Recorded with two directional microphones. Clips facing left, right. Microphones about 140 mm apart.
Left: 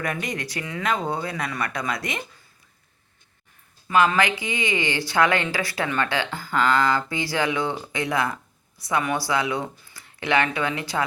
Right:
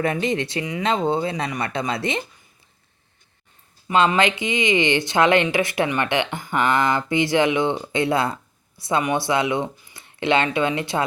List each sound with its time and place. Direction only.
0.0 s speech: 25° right (ahead or behind)
3.8 s speech: 25° right (ahead or behind)